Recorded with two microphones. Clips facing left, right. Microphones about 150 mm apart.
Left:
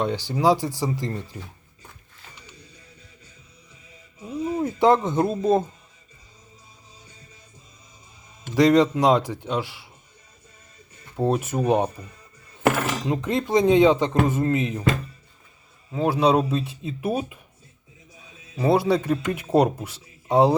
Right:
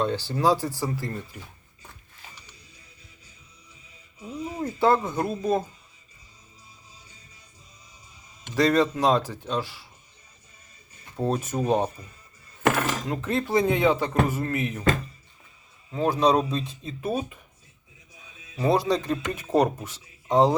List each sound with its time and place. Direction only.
0.0 s a man's voice: 15° left (ahead or behind)
4.3 s music: 30° left (ahead or behind)
4.6 s speech: 20° left (ahead or behind)
8.5 s a man's voice: 15° left (ahead or behind)
11.2 s a man's voice: 10° left (ahead or behind)
13.1 s speech: 20° left (ahead or behind)
15.9 s a man's voice: 10° left (ahead or behind)
18.5 s a man's voice: 10° left (ahead or behind)